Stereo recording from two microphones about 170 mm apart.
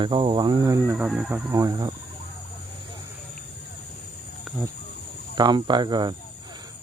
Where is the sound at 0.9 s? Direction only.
5° right (ahead or behind).